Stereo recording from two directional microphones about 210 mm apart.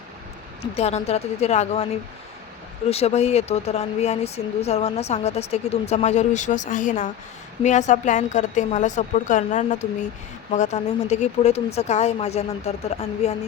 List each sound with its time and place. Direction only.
0.6 s speech: 30° left (ahead or behind)
2.9 s speech: 30° left (ahead or behind)